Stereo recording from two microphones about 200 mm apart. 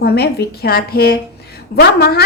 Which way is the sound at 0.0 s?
55° left (ahead or behind).